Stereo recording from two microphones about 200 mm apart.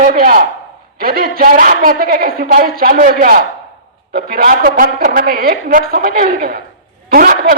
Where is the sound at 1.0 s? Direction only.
45° right (ahead or behind).